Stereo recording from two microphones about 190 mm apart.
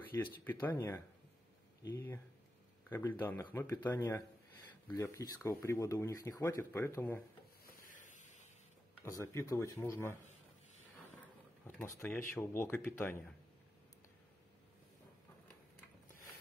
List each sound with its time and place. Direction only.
0.1 s speech: 10° left (ahead or behind)
7.6 s a sound: 45° left (ahead or behind)
9.0 s speech: 15° left (ahead or behind)
11.6 s speech: 10° left (ahead or behind)